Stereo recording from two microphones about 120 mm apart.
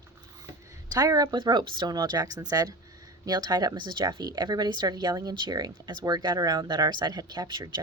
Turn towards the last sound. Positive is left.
turn(degrees=-40)  # may be behind; listen again after turning